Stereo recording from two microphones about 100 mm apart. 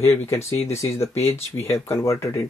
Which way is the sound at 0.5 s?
30° left (ahead or behind).